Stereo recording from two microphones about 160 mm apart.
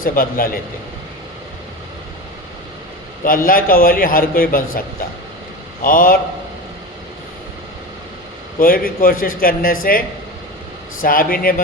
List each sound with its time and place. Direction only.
0.0 s a man's voice: 60° left (ahead or behind)
3.2 s a man's voice: 60° left (ahead or behind)
8.5 s a man's voice: 60° left (ahead or behind)
11.0 s a man's voice: 60° left (ahead or behind)